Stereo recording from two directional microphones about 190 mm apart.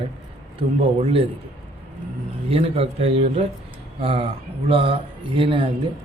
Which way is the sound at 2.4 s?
30° right (ahead or behind).